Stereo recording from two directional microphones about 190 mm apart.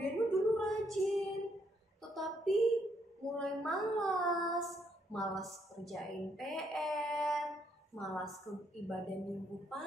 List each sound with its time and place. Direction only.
0.3 s female singing: centre (ahead or behind)
2.0 s a sound: centre (ahead or behind)
3.3 s a woman's voice: centre (ahead or behind)